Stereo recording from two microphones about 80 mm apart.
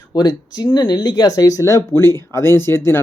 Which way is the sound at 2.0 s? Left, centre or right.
Left.